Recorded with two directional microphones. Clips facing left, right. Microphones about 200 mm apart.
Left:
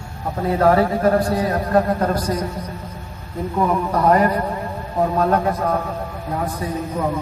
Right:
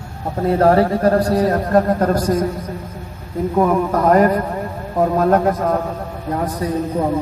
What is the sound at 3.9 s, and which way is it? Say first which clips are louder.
A man's voice: right 3 dB; 50° right (ahead or behind).